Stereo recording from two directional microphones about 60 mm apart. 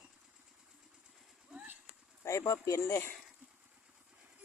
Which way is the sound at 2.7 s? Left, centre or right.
Left.